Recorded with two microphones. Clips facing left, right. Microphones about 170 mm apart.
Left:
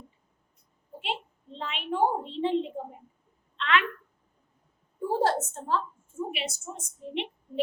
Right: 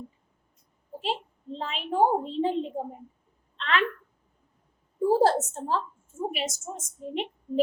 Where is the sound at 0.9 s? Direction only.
40° right (ahead or behind).